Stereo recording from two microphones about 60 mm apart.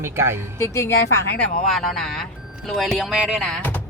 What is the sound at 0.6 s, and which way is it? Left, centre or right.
Speech, left.